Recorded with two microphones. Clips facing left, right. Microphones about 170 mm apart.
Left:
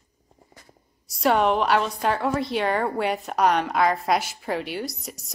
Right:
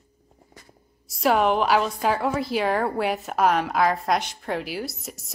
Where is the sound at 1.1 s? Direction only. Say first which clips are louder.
Even; centre (ahead or behind).